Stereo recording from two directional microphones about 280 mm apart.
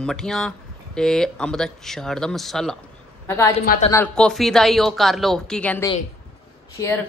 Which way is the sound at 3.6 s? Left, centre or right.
Left.